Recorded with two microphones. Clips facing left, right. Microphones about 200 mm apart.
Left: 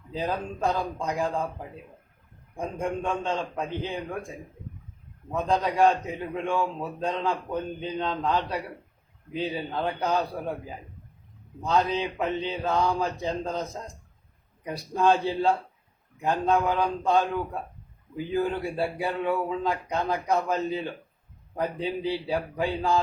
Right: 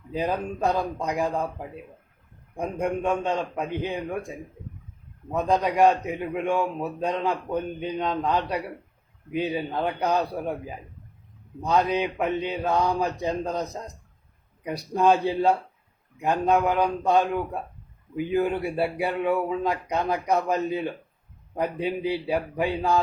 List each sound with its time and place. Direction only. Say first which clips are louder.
0.1 s a man's voice: right 3 dB; 15° right (ahead or behind)
2.6 s a man's voice: right 3 dB; 15° right (ahead or behind)
5.5 s a man's voice: right 2 dB; 15° right (ahead or behind)
11.6 s a man's voice: right 2 dB; 15° right (ahead or behind)
18.3 s a man's voice: right 2 dB; 15° right (ahead or behind)